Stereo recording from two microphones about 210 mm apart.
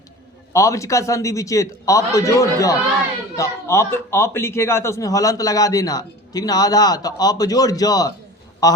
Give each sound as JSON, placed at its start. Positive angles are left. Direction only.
{"t": 0.5, "sound": "a man's voice", "side_deg": 15}